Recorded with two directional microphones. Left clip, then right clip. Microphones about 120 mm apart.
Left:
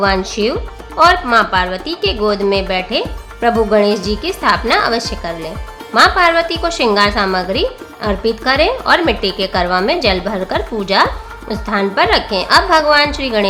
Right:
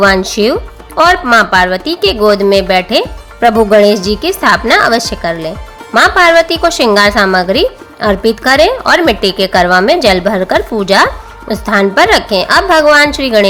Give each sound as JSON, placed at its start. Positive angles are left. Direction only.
{"t": 0.0, "sound": "a woman's voice", "side_deg": -40}